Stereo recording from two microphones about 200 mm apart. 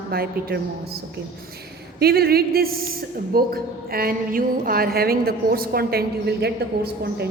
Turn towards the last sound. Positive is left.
turn(degrees=-55)  # may be behind; listen again after turning